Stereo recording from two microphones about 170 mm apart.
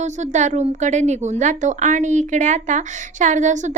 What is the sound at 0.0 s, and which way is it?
A woman's voice, 45° right (ahead or behind).